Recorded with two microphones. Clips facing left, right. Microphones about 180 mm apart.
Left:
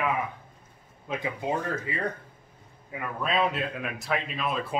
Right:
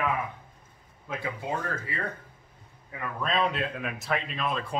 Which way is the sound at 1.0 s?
15° left (ahead or behind).